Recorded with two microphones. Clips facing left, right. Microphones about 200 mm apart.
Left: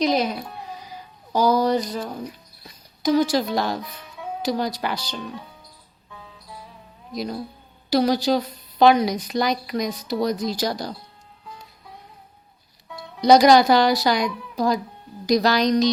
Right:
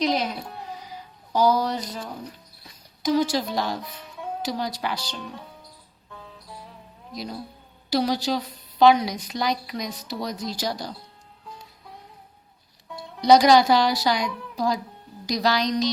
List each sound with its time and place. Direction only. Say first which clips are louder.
0.0 s music: left 3 dB; 45° left (ahead or behind)
1.3 s speech: left 3 dB; 50° left (ahead or behind)
3.1 s a woman's voice: left 3 dB; 50° left (ahead or behind)
7.9 s a woman's voice: left 4 dB; 50° left (ahead or behind)
13.2 s a woman's voice: left 2 dB; 50° left (ahead or behind)